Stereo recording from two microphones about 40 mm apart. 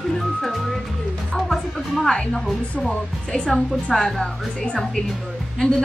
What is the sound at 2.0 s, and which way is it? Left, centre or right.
Speech, centre.